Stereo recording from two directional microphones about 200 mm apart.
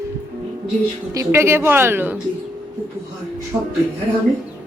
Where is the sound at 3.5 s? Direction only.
15° right (ahead or behind).